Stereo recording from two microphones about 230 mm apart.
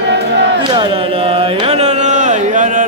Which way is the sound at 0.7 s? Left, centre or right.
Right.